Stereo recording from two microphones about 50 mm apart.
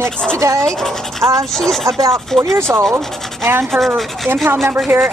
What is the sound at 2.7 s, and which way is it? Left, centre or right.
Speech, right.